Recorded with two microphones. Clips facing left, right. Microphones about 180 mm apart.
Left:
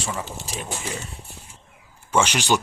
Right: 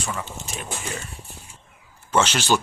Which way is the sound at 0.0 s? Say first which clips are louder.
Left 1 dB; 25° left (ahead or behind).